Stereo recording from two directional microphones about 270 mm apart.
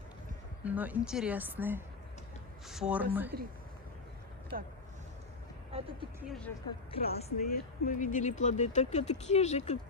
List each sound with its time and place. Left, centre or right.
0.6 s a woman's voice: centre
4.5 s speech: right
5.7 s speech: right
6.1 s a woman's voice: centre
6.9 s speech: left